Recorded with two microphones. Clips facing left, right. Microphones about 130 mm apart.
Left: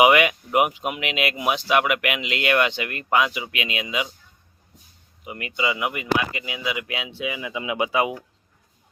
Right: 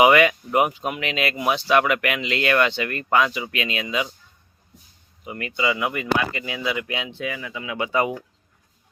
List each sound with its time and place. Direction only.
0.0 s speech: 15° left (ahead or behind)
5.2 s speech: 15° left (ahead or behind)
7.3 s speech: 15° left (ahead or behind)